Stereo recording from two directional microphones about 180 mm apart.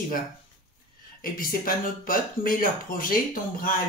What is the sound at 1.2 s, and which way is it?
A child's voice, 50° left (ahead or behind).